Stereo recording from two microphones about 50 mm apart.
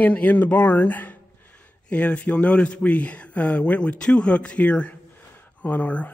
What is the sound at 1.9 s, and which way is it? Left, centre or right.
A man's voice, left.